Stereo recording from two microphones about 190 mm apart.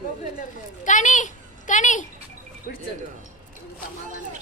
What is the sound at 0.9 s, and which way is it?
A woman's voice, 40° left (ahead or behind).